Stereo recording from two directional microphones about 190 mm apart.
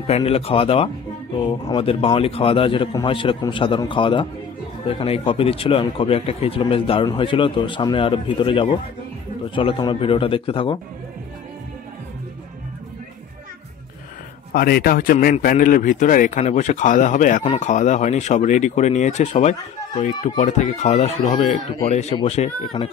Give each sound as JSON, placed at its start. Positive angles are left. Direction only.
{"t": 0.0, "sound": "a man's voice", "side_deg": 30}
{"t": 14.5, "sound": "a man's voice", "side_deg": 50}
{"t": 22.8, "sound": "a man's voice", "side_deg": 20}